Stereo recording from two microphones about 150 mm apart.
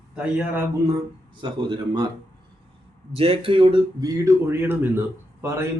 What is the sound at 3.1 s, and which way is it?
Speech, 40° right (ahead or behind).